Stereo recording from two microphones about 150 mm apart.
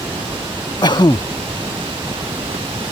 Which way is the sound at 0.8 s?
30° left (ahead or behind).